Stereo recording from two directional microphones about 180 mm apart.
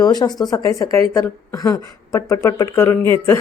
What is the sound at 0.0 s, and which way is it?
Speech, 20° left (ahead or behind).